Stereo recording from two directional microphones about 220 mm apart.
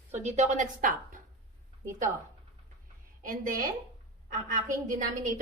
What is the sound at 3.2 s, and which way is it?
Speech, 40° right (ahead or behind).